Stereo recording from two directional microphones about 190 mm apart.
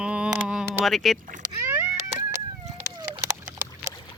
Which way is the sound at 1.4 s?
15° right (ahead or behind).